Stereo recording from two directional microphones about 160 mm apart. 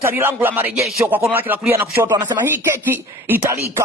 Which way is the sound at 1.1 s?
10° right (ahead or behind).